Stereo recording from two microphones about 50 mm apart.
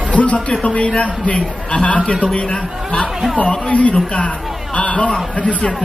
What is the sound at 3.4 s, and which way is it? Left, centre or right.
A man's voice, left.